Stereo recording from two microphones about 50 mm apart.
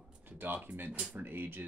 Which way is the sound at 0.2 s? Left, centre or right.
Right.